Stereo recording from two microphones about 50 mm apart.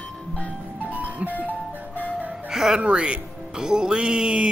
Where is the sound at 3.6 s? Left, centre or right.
Centre.